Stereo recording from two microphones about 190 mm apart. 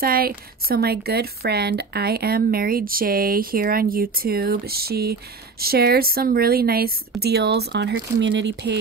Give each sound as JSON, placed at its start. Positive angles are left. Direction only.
{"t": 0.0, "sound": "speech", "side_deg": -50}